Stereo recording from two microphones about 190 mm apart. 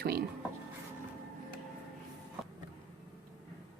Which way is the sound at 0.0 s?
55° right (ahead or behind).